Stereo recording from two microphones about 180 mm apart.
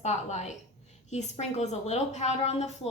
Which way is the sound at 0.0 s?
40° left (ahead or behind).